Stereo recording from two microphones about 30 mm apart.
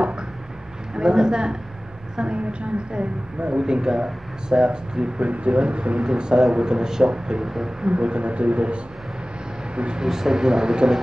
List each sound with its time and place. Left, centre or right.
0.9 s speech: right
2.1 s a woman's voice: right
3.6 s speech: right
5.2 s a woman's voice: right
6.0 s speech: right
7.4 s speech: centre
7.8 s a woman's voice: right
10.0 s speech: centre